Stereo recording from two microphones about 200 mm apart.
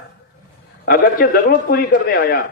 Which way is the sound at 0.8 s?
50° left (ahead or behind).